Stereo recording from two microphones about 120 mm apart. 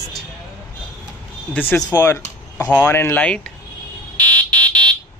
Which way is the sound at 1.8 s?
30° left (ahead or behind).